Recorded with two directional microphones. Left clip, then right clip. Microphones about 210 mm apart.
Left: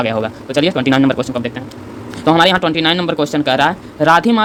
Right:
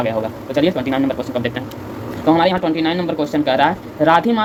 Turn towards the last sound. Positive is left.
turn(degrees=25)  # may be behind; listen again after turning